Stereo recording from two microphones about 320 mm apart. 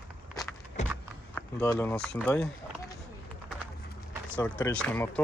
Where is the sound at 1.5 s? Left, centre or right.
Centre.